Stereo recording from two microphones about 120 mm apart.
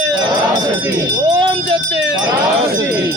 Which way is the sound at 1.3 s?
45° right (ahead or behind).